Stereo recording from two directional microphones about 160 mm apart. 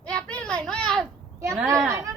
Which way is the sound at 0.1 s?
5° left (ahead or behind).